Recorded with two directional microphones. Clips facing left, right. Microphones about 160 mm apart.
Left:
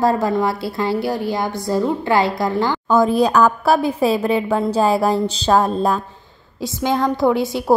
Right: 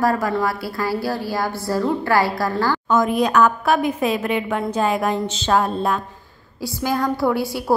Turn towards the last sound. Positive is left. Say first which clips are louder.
# left 4 dB
turn(degrees=20)  # may be behind; listen again after turning